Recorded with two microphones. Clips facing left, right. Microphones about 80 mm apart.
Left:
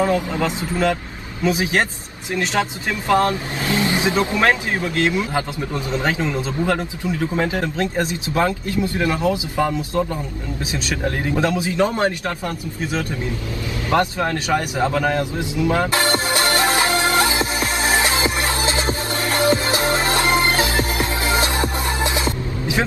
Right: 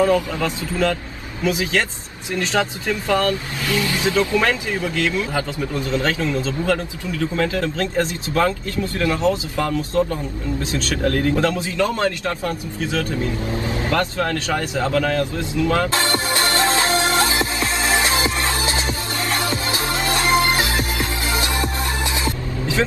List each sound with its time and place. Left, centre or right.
0.0 s a man's voice: left
3.1 s a man's voice: left
16.7 s music: left